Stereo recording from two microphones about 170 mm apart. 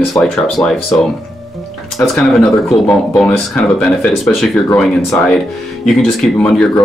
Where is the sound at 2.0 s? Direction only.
10° left (ahead or behind).